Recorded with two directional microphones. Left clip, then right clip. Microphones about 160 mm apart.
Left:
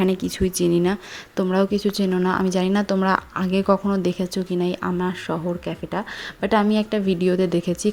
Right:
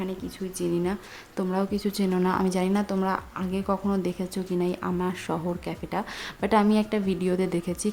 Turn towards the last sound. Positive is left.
turn(degrees=20)  # may be behind; listen again after turning